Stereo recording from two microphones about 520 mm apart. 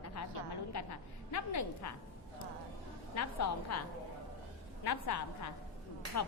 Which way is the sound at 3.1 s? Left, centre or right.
Left.